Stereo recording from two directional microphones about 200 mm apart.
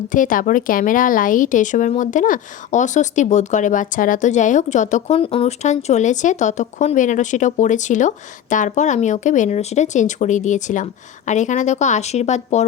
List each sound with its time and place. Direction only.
0.1 s a woman's voice: 40° left (ahead or behind)